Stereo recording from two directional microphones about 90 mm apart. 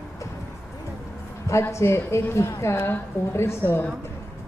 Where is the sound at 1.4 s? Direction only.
35° left (ahead or behind).